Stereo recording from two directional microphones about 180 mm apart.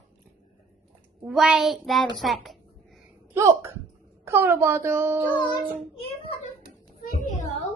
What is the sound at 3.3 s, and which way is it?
Speech, 15° right (ahead or behind).